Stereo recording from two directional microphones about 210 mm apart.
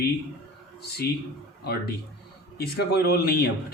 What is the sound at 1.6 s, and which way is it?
Speech, 50° left (ahead or behind).